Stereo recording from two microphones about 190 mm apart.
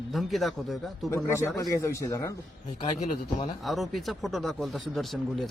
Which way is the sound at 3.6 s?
Centre (ahead or behind).